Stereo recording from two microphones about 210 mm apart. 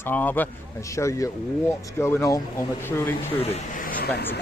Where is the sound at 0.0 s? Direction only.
10° left (ahead or behind).